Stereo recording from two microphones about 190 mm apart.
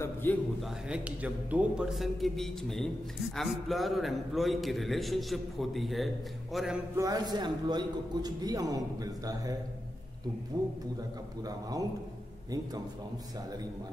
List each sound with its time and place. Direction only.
0.0 s a sound: 10° left (ahead or behind)
0.6 s a man's voice: 5° right (ahead or behind)
7.0 s a man's voice: 20° right (ahead or behind)